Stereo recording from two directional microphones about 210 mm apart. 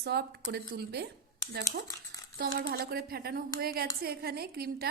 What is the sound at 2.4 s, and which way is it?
A woman's voice, 45° right (ahead or behind).